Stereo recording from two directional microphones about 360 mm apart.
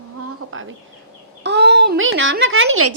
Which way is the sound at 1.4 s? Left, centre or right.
Right.